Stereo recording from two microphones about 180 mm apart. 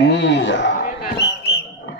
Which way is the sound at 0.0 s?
80° left.